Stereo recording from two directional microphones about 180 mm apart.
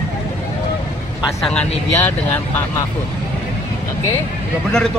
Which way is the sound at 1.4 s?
5° left (ahead or behind).